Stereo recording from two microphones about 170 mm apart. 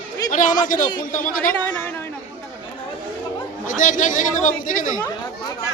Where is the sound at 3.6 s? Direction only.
50° left (ahead or behind).